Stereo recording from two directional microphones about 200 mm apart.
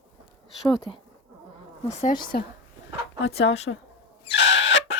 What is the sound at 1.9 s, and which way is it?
Speech, 35° left (ahead or behind).